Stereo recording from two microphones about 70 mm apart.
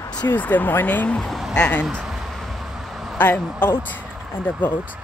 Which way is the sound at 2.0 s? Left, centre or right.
Centre.